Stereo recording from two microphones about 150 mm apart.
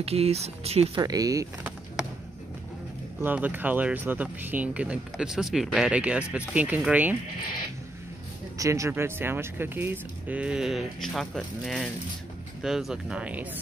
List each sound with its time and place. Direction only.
0.0 s speech: 40° right (ahead or behind)
0.9 s speech: 25° right (ahead or behind)
3.2 s speech: 10° right (ahead or behind)
8.5 s speech: 20° right (ahead or behind)